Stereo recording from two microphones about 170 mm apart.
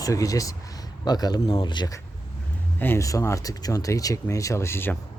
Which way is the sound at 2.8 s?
15° left (ahead or behind).